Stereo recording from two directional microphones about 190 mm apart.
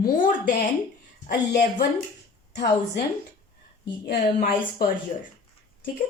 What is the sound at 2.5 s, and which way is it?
Speech, 60° left (ahead or behind).